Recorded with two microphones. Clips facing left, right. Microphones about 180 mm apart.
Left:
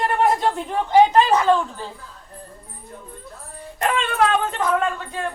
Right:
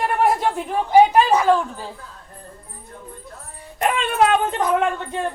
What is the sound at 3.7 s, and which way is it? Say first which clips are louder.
Speech: right 2 dB; 20° right (ahead or behind).